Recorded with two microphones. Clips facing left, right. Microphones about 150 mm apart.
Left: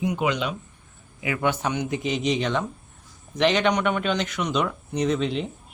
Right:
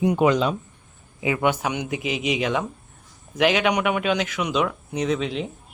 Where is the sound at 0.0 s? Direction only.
60° right (ahead or behind).